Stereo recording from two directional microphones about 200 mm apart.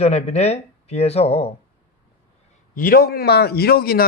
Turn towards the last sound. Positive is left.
turn(degrees=50)  # may be behind; listen again after turning